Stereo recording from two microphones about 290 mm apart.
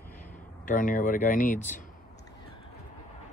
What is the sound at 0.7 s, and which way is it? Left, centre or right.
Speech, left.